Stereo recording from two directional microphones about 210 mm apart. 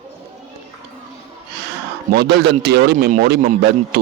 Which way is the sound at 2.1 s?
50° right (ahead or behind).